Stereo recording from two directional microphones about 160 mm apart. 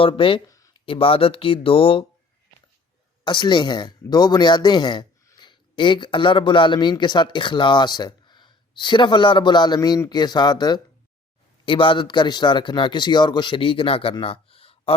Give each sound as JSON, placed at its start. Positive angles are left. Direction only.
{"t": 0.0, "sound": "a man's voice", "side_deg": 35}
{"t": 0.4, "sound": "a sound", "side_deg": 20}
{"t": 0.9, "sound": "a man's voice", "side_deg": 35}
{"t": 3.2, "sound": "a man's voice", "side_deg": 30}